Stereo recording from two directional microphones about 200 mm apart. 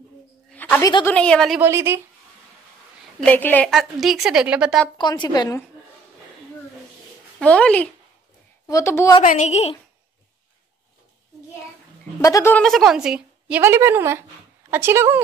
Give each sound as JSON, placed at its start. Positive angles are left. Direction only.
{"t": 0.5, "sound": "a sound", "side_deg": 10}
{"t": 1.0, "sound": "a woman's voice", "side_deg": 5}
{"t": 1.6, "sound": "speech", "side_deg": -15}
{"t": 3.2, "sound": "a woman's voice", "side_deg": 10}
{"t": 4.9, "sound": "a woman's voice", "side_deg": 20}
{"t": 7.3, "sound": "a woman's voice", "side_deg": 5}
{"t": 9.2, "sound": "speech", "side_deg": 40}
{"t": 12.2, "sound": "a woman's voice", "side_deg": 15}